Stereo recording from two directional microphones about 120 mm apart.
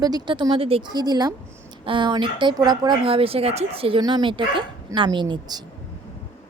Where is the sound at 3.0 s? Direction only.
50° right (ahead or behind).